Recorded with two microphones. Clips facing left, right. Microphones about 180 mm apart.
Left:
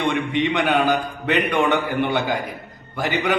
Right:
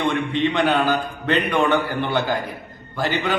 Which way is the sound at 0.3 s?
15° left (ahead or behind).